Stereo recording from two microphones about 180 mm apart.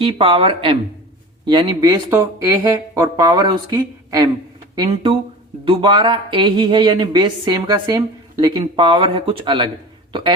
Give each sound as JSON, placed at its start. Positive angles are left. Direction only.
{"t": 0.0, "sound": "speech", "side_deg": -30}
{"t": 5.6, "sound": "speech", "side_deg": -25}